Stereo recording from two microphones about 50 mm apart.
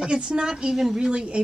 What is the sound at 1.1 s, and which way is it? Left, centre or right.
Speech, centre.